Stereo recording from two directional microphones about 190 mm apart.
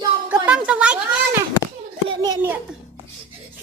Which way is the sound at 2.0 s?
20° right (ahead or behind).